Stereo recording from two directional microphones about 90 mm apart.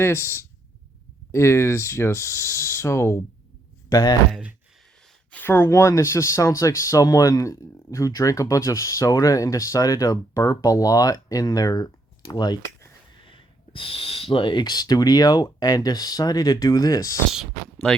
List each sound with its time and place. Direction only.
0.0 s speech: 25° left (ahead or behind)
3.8 s speech: 45° left (ahead or behind)
5.3 s speech: 25° left (ahead or behind); by 12.5 s 50° left (ahead or behind)
13.2 s speech: 75° left (ahead or behind); by 17.2 s 40° left (ahead or behind)